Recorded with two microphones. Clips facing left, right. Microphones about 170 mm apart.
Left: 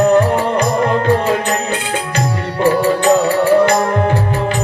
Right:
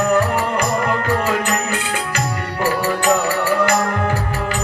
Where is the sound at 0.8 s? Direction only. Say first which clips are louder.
Left 5 dB; 25° left (ahead or behind).